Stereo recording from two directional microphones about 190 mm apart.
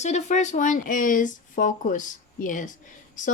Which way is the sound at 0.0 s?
35° left (ahead or behind).